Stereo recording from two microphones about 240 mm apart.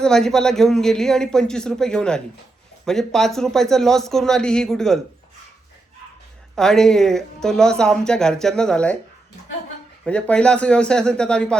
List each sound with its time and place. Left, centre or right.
0.0 s speech: centre
6.6 s speech: centre
10.0 s speech: centre